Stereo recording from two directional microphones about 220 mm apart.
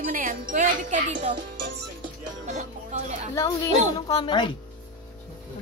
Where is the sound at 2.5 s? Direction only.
30° right (ahead or behind).